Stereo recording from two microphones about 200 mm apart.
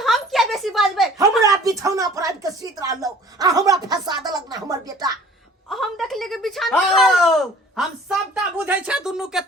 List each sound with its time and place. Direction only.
0.0 s a sound: centre (ahead or behind)
1.4 s speech: 15° right (ahead or behind)
4.3 s music: 20° right (ahead or behind)
5.6 s wail: centre (ahead or behind)